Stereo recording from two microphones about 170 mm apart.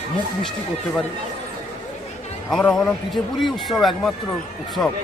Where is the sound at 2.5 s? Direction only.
Centre (ahead or behind).